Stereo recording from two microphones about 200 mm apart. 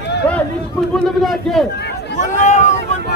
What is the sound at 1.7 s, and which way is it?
Chatter, 60° left (ahead or behind).